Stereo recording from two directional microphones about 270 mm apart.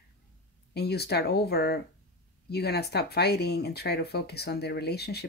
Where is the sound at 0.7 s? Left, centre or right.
Left.